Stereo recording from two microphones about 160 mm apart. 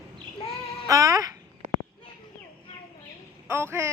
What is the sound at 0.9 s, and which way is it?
Speech, 20° right (ahead or behind).